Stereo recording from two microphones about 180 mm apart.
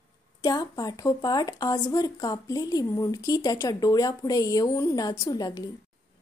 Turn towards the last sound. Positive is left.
turn(degrees=20)  # may be behind; listen again after turning